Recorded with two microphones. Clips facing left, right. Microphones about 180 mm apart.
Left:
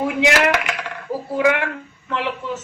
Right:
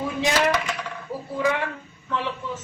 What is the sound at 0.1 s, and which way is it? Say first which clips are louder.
Speech: left 2 dB; 80° left.